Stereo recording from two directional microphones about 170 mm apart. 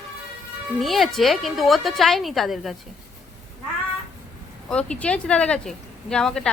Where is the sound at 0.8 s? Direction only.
Centre (ahead or behind).